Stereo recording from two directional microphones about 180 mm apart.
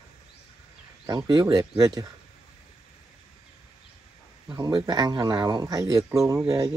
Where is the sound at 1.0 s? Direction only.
25° right (ahead or behind).